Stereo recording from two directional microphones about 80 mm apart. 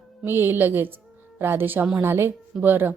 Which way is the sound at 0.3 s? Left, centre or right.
Right.